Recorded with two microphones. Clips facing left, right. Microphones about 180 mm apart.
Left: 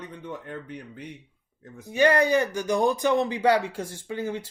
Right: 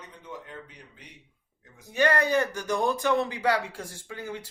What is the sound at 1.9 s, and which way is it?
Speech, 15° left (ahead or behind).